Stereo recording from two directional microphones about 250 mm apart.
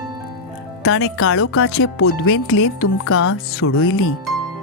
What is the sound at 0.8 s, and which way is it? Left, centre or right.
Speech, left.